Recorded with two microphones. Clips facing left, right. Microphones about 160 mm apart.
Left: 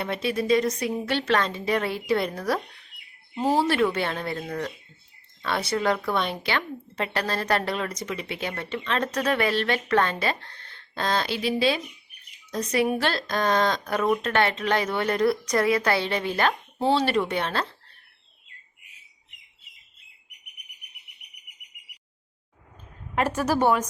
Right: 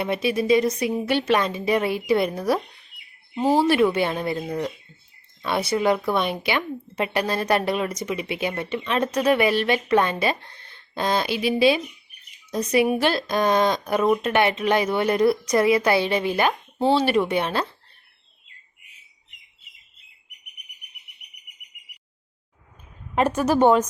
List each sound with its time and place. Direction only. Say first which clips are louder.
0.0 s speech: right 4 dB; 10° right (ahead or behind)
16.7 s speech: right 4 dB; centre (ahead or behind)
23.1 s a woman's voice: right 4 dB; 20° right (ahead or behind)